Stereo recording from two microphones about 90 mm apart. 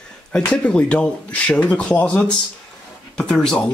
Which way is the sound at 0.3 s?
10° left (ahead or behind).